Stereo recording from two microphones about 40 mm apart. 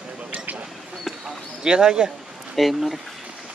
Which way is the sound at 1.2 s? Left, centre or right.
Centre.